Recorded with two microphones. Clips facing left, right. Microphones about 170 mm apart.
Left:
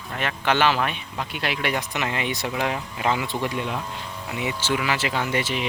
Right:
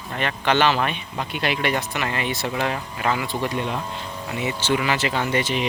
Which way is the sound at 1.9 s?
15° left (ahead or behind).